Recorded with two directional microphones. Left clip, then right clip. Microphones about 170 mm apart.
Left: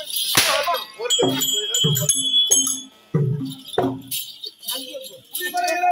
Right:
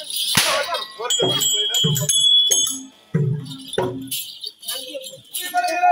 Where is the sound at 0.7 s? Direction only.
10° left (ahead or behind).